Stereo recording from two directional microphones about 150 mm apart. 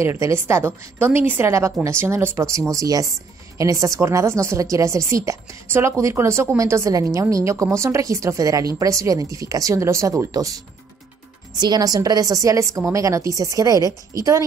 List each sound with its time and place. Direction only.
0.0 s a woman's voice: 20° right (ahead or behind)